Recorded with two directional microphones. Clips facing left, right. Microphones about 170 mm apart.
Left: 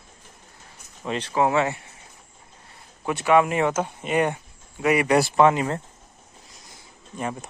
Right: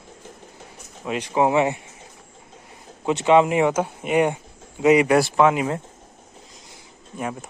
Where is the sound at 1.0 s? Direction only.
10° right (ahead or behind).